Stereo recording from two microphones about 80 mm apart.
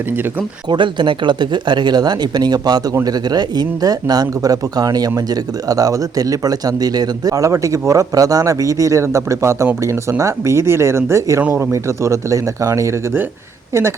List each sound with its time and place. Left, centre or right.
0.7 s speech: right